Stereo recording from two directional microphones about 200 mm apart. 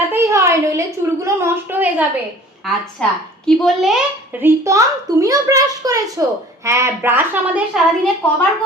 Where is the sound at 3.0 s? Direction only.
5° left (ahead or behind).